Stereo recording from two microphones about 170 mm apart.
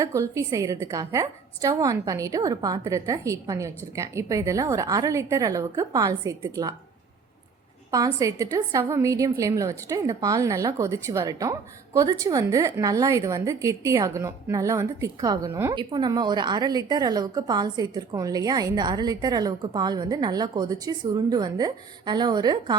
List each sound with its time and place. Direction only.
0.0 s a woman's voice: 15° right (ahead or behind)
7.9 s a woman's voice: 20° right (ahead or behind)